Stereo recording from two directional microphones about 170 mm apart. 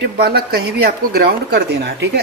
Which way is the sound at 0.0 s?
70° right (ahead or behind).